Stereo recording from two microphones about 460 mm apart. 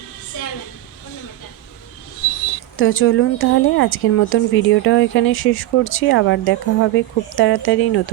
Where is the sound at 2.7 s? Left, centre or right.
Left.